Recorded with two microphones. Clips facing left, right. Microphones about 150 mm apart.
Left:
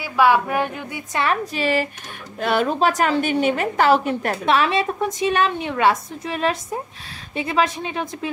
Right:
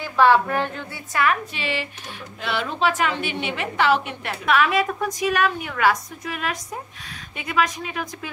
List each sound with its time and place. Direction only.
0.0 s a woman's voice: 10° left (ahead or behind)
1.2 s a woman's voice: 35° left (ahead or behind)
4.5 s a woman's voice: 30° left (ahead or behind)